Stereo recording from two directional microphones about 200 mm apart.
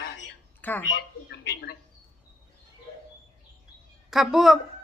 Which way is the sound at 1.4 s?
55° left (ahead or behind).